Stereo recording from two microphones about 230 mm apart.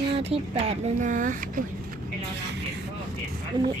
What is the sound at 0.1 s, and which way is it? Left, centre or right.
Speech, right.